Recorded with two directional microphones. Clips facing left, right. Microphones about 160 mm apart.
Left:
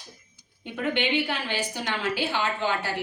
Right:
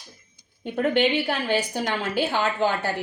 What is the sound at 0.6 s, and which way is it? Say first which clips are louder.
A woman's voice: right 6 dB; 40° right (ahead or behind).